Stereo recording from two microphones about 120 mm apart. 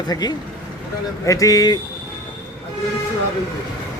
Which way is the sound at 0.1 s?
35° left (ahead or behind).